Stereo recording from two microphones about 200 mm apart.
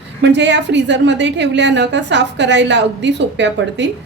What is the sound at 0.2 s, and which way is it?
A woman's voice, 60° right (ahead or behind).